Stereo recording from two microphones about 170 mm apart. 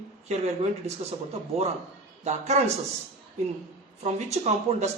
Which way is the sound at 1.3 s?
40° right (ahead or behind).